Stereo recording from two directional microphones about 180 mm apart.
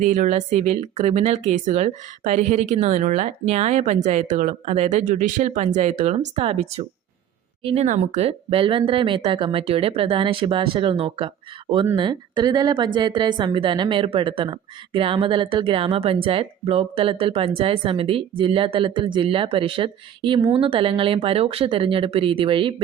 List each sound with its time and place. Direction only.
0.0 s a woman's voice: 45° right (ahead or behind); by 22.7 s 30° right (ahead or behind)